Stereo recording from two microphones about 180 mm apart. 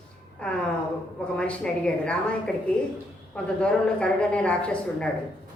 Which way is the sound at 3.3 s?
5° left (ahead or behind).